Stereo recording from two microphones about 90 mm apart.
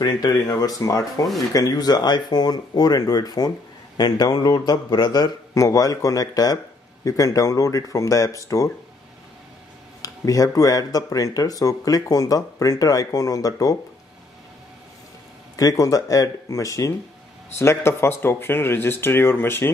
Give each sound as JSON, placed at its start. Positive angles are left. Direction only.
{"t": 0.0, "sound": "speech", "side_deg": 50}
{"t": 10.0, "sound": "speech", "side_deg": 40}
{"t": 15.5, "sound": "speech", "side_deg": 40}